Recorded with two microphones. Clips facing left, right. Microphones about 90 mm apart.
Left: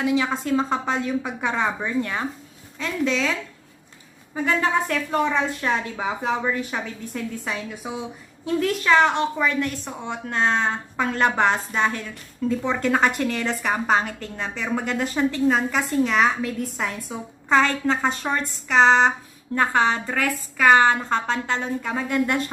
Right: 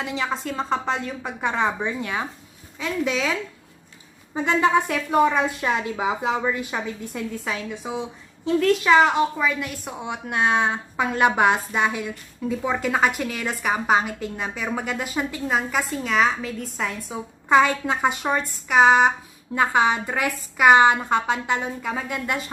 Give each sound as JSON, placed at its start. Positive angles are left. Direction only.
{"t": 0.0, "sound": "a woman's voice", "side_deg": 0}
{"t": 1.9, "sound": "a woman's voice", "side_deg": -10}
{"t": 4.3, "sound": "a woman's voice", "side_deg": -15}
{"t": 6.7, "sound": "a woman's voice", "side_deg": 0}
{"t": 8.8, "sound": "a woman's voice", "side_deg": -10}
{"t": 17.5, "sound": "a woman's voice", "side_deg": -10}